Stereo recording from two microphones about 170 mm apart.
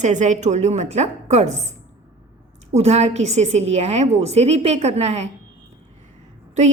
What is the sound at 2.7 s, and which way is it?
A woman's voice, 40° right (ahead or behind).